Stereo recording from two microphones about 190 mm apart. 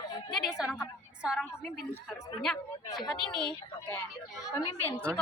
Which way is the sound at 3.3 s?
5° left (ahead or behind).